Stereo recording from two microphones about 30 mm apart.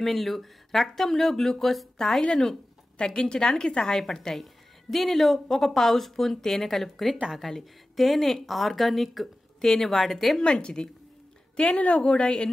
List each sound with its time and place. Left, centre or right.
0.0 s speech: centre
2.0 s speech: centre
3.0 s a woman's voice: left
4.9 s a woman's voice: centre
9.6 s speech: centre
10.4 s speech: left
11.6 s a woman's voice: left
12.2 s speech: left